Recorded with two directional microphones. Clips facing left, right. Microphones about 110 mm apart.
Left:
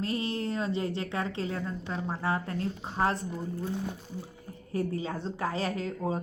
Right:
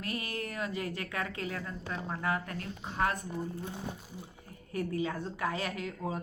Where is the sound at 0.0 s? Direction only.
25° left (ahead or behind).